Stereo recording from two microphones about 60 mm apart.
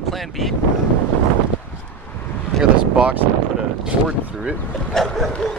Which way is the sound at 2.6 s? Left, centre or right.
Centre.